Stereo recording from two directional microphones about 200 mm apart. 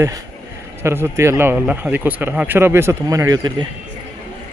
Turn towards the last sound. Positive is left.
turn(degrees=-20)  # may be behind; listen again after turning